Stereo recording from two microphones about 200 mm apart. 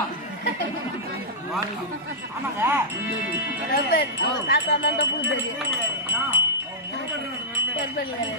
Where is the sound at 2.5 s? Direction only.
10° right (ahead or behind).